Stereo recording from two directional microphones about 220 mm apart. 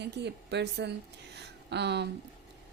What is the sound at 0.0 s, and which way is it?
A woman's voice, 50° right (ahead or behind).